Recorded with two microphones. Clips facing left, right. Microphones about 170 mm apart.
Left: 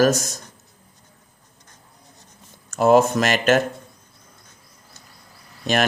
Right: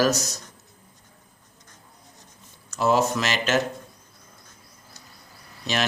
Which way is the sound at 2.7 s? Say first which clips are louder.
Left 6 dB; 50° left (ahead or behind).